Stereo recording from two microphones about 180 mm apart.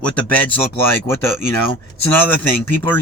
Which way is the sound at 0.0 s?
10° left (ahead or behind).